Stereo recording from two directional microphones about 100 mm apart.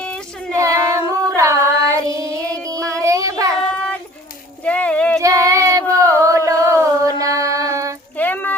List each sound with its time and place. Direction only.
0.0 s child singing: 10° left (ahead or behind)
0.6 s singing: 30° right (ahead or behind)
1.4 s child singing: 30° right (ahead or behind)
3.7 s child singing: 10° left (ahead or behind)
4.6 s a sound: 10° left (ahead or behind)
5.2 s female singing: 35° right (ahead or behind)
8.2 s a sound: 15° left (ahead or behind)